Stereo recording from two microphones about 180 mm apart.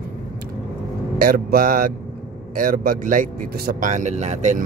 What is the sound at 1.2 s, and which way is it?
Speech, 55° right (ahead or behind).